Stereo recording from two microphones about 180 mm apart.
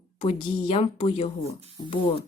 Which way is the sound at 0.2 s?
30° left (ahead or behind).